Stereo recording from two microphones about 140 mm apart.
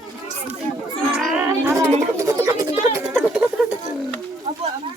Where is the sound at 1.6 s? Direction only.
20° right (ahead or behind).